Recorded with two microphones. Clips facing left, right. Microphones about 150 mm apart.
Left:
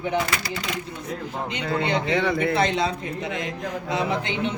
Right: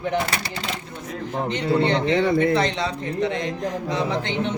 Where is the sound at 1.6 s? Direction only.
35° right (ahead or behind).